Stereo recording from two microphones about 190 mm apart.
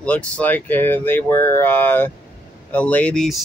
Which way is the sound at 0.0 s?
10° left (ahead or behind).